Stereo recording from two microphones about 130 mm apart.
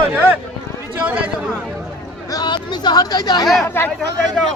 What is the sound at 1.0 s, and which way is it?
Speech, 10° right (ahead or behind).